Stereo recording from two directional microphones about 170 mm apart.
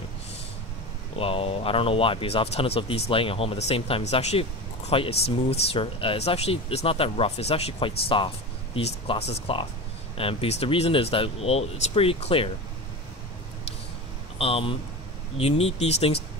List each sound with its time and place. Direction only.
1.1 s speech: 35° left (ahead or behind)
14.4 s speech: 35° left (ahead or behind)